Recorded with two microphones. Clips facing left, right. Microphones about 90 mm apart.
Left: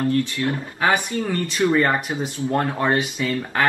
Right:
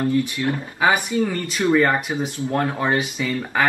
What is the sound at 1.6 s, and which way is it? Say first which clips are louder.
Speech: right 1 dB; 5° right (ahead or behind).